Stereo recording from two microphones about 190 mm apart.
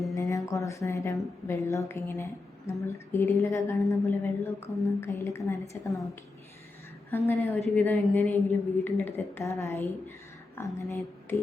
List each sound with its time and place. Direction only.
0.1 s a sound: 15° left (ahead or behind)
1.5 s speech: 15° left (ahead or behind)
7.1 s speech: 10° left (ahead or behind)